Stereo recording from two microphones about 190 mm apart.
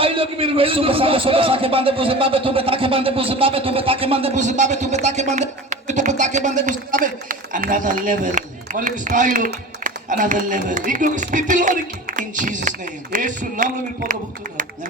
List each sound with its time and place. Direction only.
0.0 s a man's voice: 30° right (ahead or behind)